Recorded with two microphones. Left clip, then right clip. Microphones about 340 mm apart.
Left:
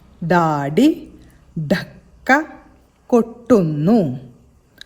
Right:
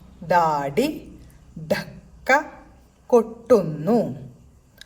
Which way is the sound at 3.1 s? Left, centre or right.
Left.